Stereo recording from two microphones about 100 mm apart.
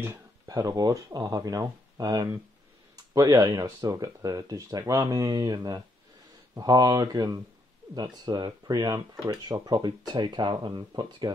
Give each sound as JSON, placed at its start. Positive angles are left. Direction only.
{"t": 0.5, "sound": "speech", "side_deg": -40}